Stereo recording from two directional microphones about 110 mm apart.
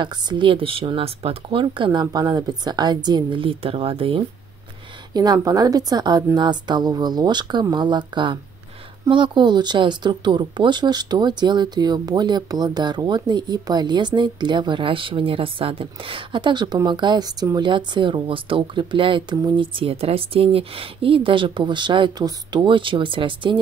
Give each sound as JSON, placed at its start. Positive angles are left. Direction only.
{"t": 0.0, "sound": "speech", "side_deg": -45}
{"t": 5.1, "sound": "speech", "side_deg": -40}